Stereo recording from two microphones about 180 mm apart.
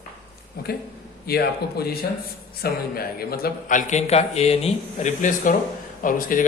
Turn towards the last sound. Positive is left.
turn(degrees=50)  # may be behind; listen again after turning